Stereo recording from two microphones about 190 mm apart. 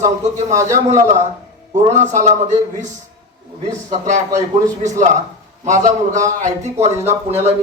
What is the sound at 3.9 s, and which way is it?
Speech, 40° right (ahead or behind).